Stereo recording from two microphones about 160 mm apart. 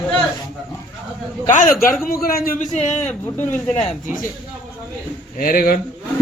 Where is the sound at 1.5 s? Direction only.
55° left (ahead or behind).